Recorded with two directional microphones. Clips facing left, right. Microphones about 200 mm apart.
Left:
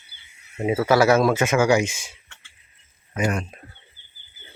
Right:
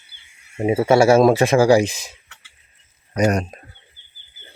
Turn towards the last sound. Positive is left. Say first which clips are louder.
# right 6 dB
turn(degrees=-40)  # may be behind; listen again after turning